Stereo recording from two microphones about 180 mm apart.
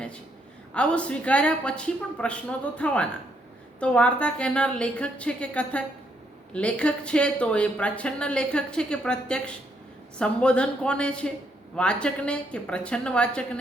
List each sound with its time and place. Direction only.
0.7 s speech: 5° left (ahead or behind)